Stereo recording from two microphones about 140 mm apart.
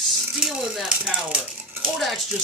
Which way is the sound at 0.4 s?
5° right (ahead or behind).